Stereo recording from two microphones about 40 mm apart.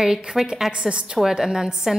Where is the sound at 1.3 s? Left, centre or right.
Centre.